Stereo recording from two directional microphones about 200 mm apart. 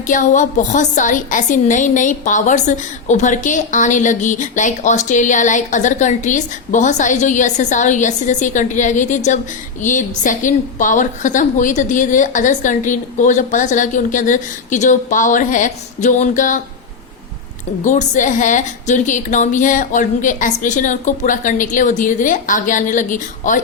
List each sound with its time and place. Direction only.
0.1 s a woman's voice: 40° left (ahead or behind)
17.8 s a woman's voice: 40° left (ahead or behind)